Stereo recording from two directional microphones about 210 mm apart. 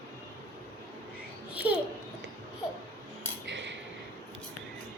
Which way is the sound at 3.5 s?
55° right (ahead or behind).